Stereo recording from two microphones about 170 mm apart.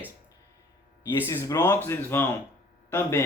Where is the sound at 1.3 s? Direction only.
20° left (ahead or behind).